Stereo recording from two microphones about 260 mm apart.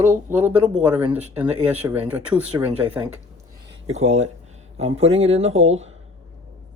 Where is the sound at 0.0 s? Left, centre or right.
Centre.